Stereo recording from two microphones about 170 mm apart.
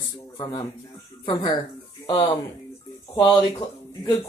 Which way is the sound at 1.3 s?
20° left (ahead or behind).